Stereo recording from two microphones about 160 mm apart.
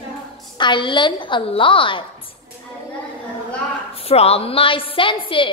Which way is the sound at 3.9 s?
40° left (ahead or behind).